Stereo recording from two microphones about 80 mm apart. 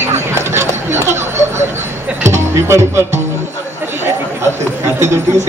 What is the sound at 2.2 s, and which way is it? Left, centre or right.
Speech, right.